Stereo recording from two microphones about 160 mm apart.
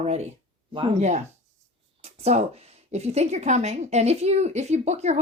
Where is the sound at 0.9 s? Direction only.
45° right (ahead or behind).